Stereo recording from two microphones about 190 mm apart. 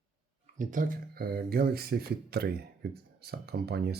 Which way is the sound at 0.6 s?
45° right (ahead or behind).